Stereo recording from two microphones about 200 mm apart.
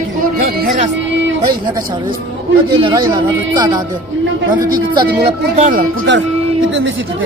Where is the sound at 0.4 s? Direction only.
50° right (ahead or behind).